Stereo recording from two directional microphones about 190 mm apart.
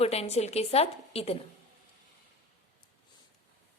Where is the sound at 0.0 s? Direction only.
35° left (ahead or behind).